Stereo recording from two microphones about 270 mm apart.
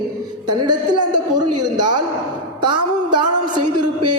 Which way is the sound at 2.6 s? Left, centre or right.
Centre.